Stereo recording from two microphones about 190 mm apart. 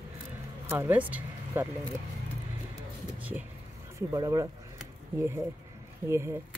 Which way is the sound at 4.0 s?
15° right (ahead or behind).